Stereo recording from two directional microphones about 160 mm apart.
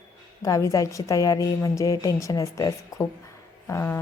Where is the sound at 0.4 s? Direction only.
20° left (ahead or behind).